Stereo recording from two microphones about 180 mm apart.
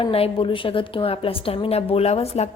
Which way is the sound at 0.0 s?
30° left (ahead or behind).